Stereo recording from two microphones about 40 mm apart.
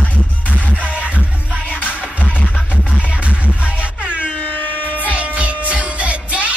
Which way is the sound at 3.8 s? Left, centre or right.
Right.